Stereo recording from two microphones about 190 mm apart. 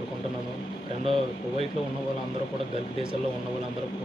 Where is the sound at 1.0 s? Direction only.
30° right (ahead or behind).